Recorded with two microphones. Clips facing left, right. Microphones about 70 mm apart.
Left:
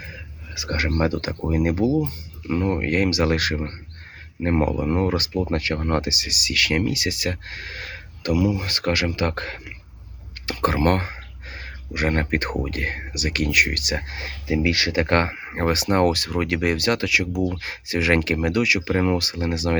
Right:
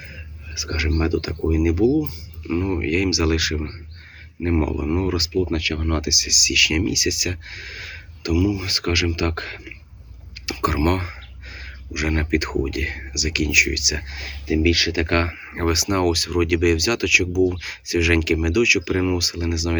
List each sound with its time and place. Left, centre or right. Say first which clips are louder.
0.5 s speech: even; left
10.4 s a sound: left 4 dB; left
10.8 s speech: left 1 dB; left